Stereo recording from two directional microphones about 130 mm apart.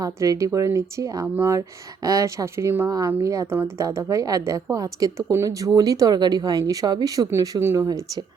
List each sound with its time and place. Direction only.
0.0 s speech: 25° right (ahead or behind)